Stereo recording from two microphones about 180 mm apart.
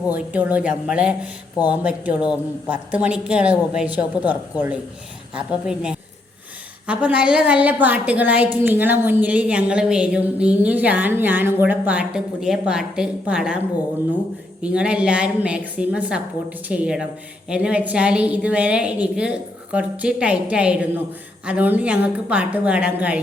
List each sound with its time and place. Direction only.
0.1 s a woman's voice: 10° right (ahead or behind)
14.6 s a woman's voice: 5° right (ahead or behind)